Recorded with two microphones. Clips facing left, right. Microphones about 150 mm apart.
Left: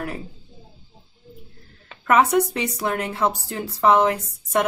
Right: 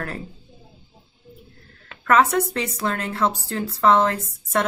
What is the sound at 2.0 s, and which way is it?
Speech, 15° left (ahead or behind).